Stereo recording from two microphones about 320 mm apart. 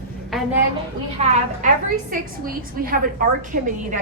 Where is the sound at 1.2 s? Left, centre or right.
Centre.